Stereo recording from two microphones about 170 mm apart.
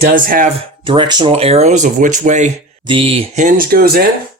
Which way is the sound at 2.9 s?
30° right (ahead or behind).